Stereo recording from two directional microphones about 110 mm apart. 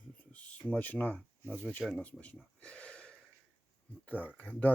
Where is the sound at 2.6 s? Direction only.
10° left (ahead or behind).